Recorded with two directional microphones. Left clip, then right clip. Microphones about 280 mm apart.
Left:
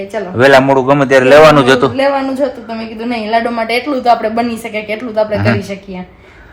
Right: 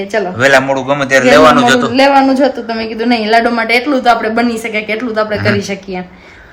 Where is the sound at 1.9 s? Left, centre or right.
Centre.